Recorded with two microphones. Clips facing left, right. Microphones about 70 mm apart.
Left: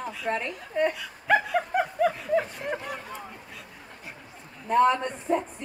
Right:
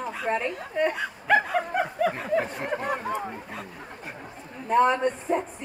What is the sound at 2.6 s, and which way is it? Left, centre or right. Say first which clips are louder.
Speech: right 4 dB; right.